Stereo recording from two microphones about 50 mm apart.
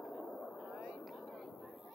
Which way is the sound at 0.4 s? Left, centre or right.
Centre.